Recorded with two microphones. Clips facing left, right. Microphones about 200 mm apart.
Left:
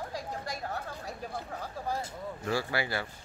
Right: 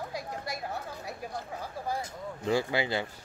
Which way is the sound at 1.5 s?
15° right (ahead or behind).